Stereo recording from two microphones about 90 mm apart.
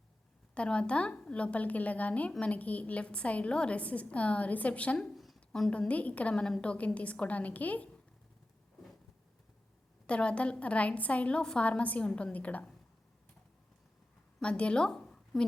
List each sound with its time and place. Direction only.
0.5 s a woman's voice: 10° left (ahead or behind)
5.0 s a sound: centre (ahead or behind)
5.5 s a woman's voice: 10° left (ahead or behind)
5.9 s a woman's voice: 15° left (ahead or behind)
10.1 s a woman's voice: 10° left (ahead or behind)
14.4 s speech: 10° left (ahead or behind)